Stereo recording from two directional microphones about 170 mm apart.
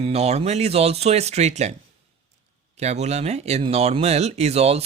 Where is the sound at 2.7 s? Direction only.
40° right (ahead or behind).